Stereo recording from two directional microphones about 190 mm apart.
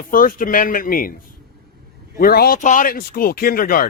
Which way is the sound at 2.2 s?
55° left (ahead or behind).